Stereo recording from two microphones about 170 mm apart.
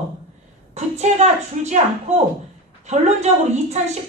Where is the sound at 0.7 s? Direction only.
40° right (ahead or behind).